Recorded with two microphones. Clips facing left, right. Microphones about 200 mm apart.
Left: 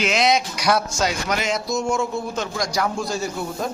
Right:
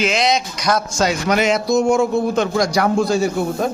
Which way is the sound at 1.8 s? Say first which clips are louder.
Right 8 dB; 55° right (ahead or behind).